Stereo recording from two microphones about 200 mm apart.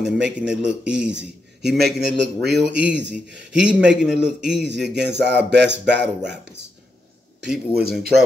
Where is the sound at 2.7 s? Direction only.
60° right (ahead or behind).